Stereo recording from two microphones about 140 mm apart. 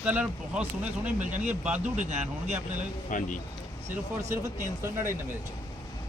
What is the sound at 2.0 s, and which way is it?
Speech, 55° right (ahead or behind).